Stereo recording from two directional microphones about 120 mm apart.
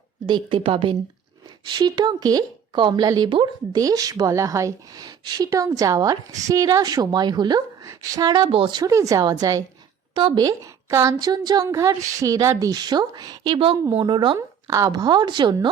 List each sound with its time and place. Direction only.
0.3 s a woman's voice: 40° right (ahead or behind)
8.4 s speech: 45° right (ahead or behind)
8.9 s a woman's voice: 25° right (ahead or behind)
14.3 s a woman's voice: 30° right (ahead or behind)